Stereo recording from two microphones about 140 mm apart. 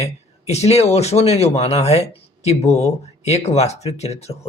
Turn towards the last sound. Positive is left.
turn(degrees=50)  # may be behind; listen again after turning